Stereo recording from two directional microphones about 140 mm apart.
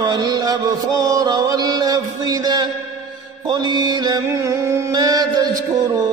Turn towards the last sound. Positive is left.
turn(degrees=-30)  # may be behind; listen again after turning